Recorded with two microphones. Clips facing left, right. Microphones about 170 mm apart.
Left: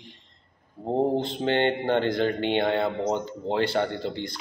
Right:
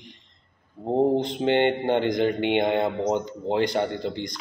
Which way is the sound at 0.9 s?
15° right (ahead or behind).